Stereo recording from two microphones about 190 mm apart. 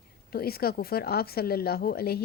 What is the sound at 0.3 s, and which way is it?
Speech, 55° left (ahead or behind).